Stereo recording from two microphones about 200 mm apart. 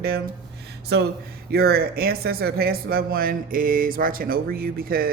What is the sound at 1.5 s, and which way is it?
Speech, 50° right (ahead or behind).